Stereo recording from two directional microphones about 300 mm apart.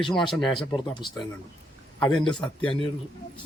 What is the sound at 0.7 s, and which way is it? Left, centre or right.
Speech, centre.